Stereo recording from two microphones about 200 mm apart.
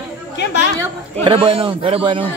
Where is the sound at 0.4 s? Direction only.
60° left (ahead or behind).